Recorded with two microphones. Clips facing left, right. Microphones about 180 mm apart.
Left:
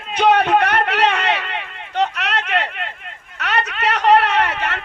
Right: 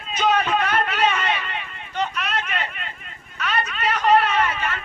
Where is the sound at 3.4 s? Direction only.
70° left (ahead or behind).